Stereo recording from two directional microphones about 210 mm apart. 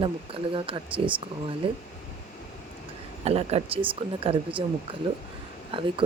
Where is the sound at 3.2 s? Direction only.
30° right (ahead or behind).